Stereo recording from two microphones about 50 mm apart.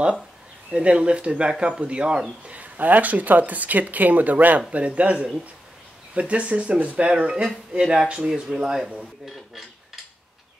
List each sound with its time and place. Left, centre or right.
0.7 s speech: right
2.4 s speech: right; by 8.8 s centre